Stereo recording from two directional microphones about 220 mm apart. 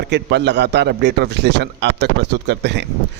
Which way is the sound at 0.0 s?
50° right (ahead or behind).